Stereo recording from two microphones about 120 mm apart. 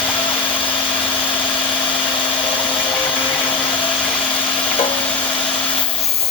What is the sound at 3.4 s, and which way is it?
Blender, 45° left (ahead or behind).